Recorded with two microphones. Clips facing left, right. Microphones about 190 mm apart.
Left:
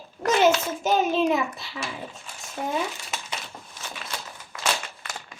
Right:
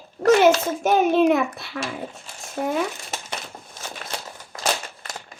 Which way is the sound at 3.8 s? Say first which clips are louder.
Right 3 dB; 40° right (ahead or behind).